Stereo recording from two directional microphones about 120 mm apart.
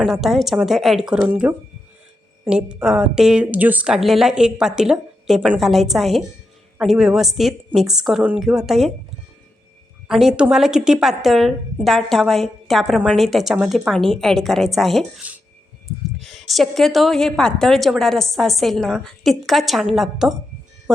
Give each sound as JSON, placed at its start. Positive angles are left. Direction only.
{"t": 0.0, "sound": "a woman's voice", "side_deg": 0}
{"t": 1.3, "sound": "a woman's voice", "side_deg": -15}
{"t": 10.1, "sound": "a woman's voice", "side_deg": 0}
{"t": 15.2, "sound": "speech", "side_deg": -15}
{"t": 16.2, "sound": "a woman's voice", "side_deg": 0}